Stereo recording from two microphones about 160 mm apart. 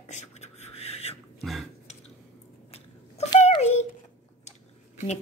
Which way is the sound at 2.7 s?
40° left (ahead or behind).